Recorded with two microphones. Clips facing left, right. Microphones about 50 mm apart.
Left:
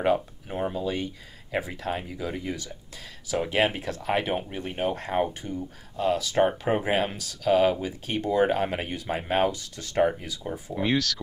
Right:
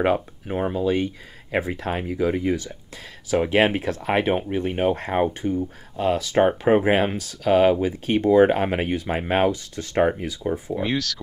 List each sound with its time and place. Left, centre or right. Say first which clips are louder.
0.0 s speech: right 3 dB; right
10.8 s speech: left 4 dB; centre